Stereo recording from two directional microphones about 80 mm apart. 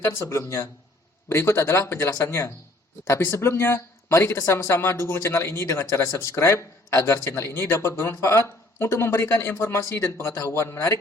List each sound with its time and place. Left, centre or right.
0.1 s speech: left